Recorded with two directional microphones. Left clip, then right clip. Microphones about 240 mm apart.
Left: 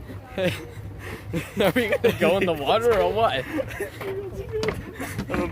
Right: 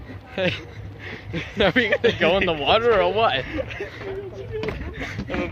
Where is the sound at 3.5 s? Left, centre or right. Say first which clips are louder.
Even; left.